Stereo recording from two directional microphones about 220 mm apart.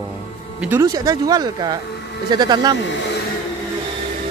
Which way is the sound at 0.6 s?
10° right (ahead or behind).